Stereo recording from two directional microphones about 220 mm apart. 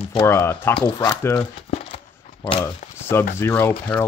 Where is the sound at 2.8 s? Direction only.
35° left (ahead or behind).